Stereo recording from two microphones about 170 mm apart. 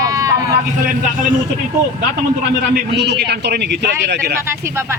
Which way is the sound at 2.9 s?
85° right.